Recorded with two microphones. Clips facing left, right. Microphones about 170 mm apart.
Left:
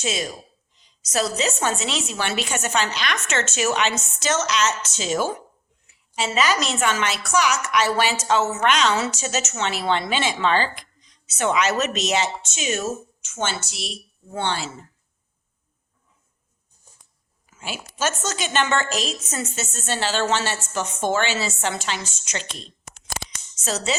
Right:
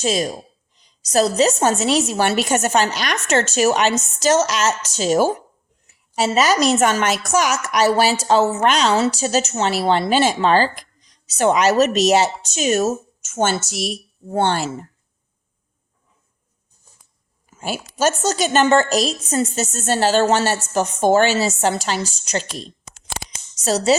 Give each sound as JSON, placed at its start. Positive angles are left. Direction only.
{"t": 0.0, "sound": "a woman's voice", "side_deg": -35}
{"t": 17.5, "sound": "a woman's voice", "side_deg": -40}
{"t": 23.1, "sound": "a sound", "side_deg": -40}